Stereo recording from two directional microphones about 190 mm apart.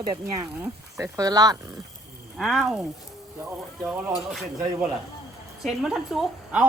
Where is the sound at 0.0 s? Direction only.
20° right (ahead or behind).